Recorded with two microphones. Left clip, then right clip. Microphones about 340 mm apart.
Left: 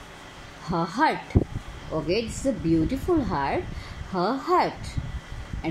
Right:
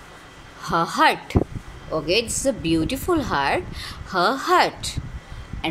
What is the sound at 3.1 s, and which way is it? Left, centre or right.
Speech, right.